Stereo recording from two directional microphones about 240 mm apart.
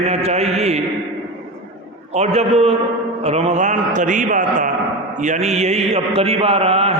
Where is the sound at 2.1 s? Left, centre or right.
Right.